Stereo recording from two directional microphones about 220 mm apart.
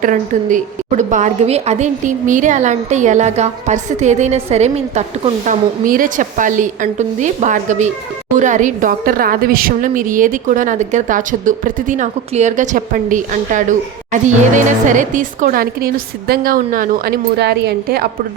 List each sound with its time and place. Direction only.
0.0 s a woman's voice: 35° right (ahead or behind)